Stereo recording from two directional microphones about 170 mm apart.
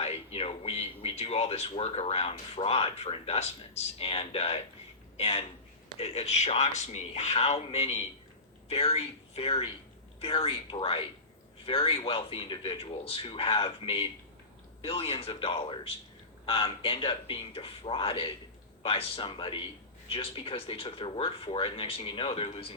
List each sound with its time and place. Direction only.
0.0 s speech: 40° left (ahead or behind)